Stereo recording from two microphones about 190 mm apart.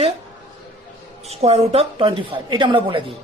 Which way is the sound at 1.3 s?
35° right (ahead or behind).